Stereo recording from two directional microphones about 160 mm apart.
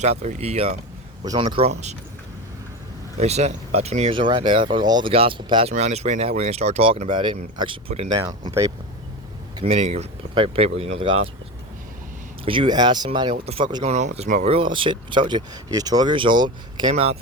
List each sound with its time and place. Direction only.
0.0 s speech: 45° right (ahead or behind)
1.2 s speech: 25° right (ahead or behind)
3.2 s speech: 40° right (ahead or behind)
5.7 s speech: 45° right (ahead or behind)
7.1 s speech: 30° right (ahead or behind)
8.1 s speech: 25° right (ahead or behind)
9.6 s speech: 40° right (ahead or behind)
12.5 s speech: 30° right (ahead or behind)
13.8 s speech: 45° right (ahead or behind)
14.5 s speech: 30° right (ahead or behind)
16.9 s speech: 40° right (ahead or behind)